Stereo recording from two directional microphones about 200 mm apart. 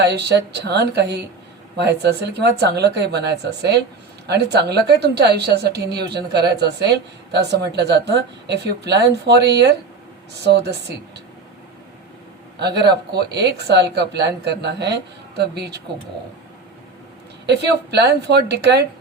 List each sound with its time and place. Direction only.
0.0 s speech: 55° right (ahead or behind)
12.8 s speech: 55° right (ahead or behind)
17.4 s speech: 55° right (ahead or behind)